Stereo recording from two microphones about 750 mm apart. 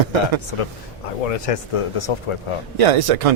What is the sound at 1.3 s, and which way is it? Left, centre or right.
Speech, left.